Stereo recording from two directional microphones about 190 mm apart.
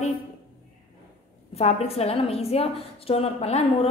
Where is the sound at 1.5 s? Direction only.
35° left (ahead or behind).